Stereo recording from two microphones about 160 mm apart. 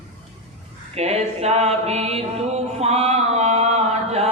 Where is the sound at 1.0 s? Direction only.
40° right (ahead or behind).